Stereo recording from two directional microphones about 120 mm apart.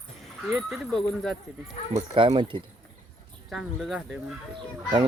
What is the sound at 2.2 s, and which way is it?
Speech, 45° right (ahead or behind).